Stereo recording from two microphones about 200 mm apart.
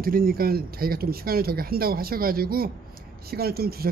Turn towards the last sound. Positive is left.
turn(degrees=-50)  # may be behind; listen again after turning